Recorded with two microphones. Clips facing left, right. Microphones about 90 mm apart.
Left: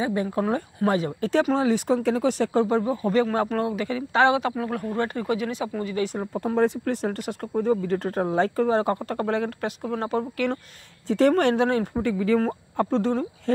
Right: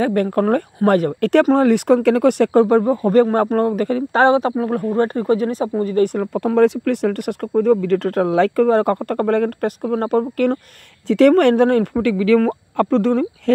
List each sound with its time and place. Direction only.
0.0 s speech: 60° right (ahead or behind); by 6.0 s 40° right (ahead or behind)
6.1 s speech: 75° right (ahead or behind); by 10.6 s 45° right (ahead or behind)
11.1 s speech: 70° right (ahead or behind)